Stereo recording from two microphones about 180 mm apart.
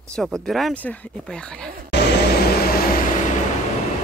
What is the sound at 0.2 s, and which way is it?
Speech, centre (ahead or behind).